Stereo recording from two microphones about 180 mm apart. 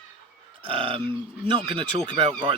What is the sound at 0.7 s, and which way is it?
Speech, 30° right (ahead or behind).